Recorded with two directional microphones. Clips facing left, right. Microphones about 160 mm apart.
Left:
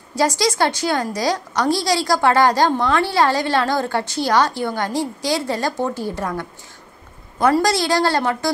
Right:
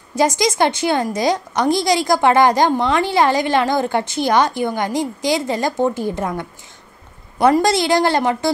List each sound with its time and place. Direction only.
0.1 s a woman's voice: 20° right (ahead or behind)
7.4 s a woman's voice: 20° right (ahead or behind)